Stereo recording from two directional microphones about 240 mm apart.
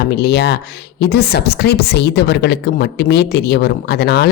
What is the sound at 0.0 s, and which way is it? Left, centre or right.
A woman's voice, left.